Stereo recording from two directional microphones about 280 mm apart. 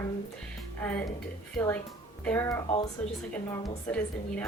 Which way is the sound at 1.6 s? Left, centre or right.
Centre.